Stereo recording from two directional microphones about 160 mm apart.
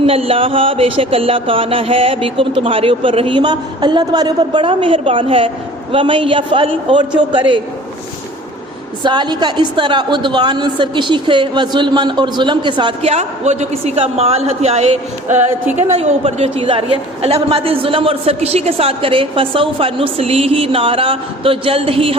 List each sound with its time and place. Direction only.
0.0 s a woman's voice: 35° right (ahead or behind)
9.0 s a woman's voice: 25° right (ahead or behind)
13.0 s a woman's voice: 45° right (ahead or behind)